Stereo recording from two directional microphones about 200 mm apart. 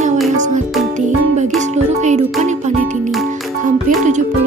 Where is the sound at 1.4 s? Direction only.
35° right (ahead or behind).